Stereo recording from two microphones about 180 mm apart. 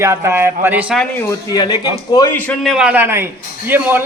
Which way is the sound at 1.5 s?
20° left (ahead or behind).